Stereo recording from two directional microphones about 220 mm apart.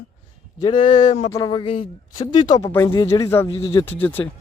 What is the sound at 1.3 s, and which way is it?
Speech, 20° left (ahead or behind).